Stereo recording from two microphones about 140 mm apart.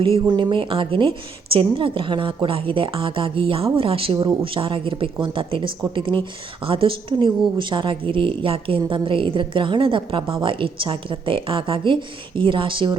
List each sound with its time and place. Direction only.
0.0 s a woman's voice: 35° right (ahead or behind)